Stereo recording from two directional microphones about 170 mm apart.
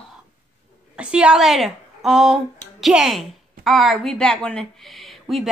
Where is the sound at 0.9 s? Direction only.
5° right (ahead or behind).